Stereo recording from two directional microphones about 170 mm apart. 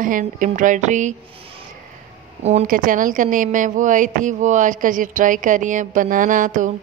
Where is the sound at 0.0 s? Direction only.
50° right (ahead or behind).